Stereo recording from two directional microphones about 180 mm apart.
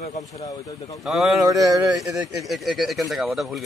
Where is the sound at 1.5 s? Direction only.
20° right (ahead or behind).